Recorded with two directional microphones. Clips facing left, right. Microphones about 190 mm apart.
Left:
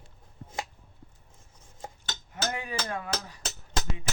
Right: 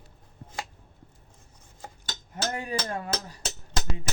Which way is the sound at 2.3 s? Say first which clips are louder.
Right 2 dB; 40° right (ahead or behind).